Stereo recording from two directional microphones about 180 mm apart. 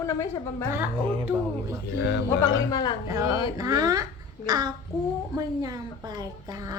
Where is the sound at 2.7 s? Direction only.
20° left (ahead or behind).